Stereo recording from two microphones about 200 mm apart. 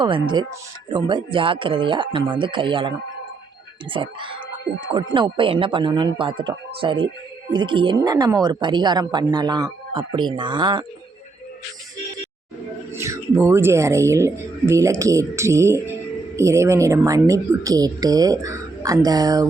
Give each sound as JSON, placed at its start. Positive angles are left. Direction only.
{"t": 0.0, "sound": "a woman's voice", "side_deg": -25}
{"t": 3.9, "sound": "a woman's voice", "side_deg": -25}
{"t": 12.9, "sound": "a woman's voice", "side_deg": -15}